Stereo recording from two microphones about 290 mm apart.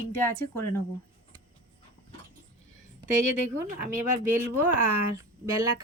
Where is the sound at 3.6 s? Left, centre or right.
Right.